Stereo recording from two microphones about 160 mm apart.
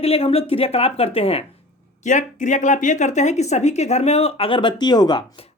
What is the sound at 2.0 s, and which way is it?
Speech, 50° left (ahead or behind).